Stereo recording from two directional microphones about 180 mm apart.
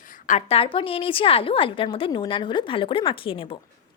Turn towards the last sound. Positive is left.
turn(degrees=30)  # may be behind; listen again after turning